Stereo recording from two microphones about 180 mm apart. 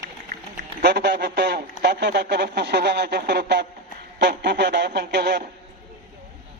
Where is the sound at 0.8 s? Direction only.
65° right (ahead or behind).